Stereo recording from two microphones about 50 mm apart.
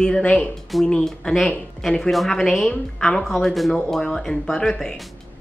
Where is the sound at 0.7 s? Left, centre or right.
Centre.